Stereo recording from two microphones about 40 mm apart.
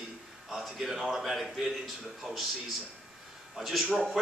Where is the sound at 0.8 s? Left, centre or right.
Centre.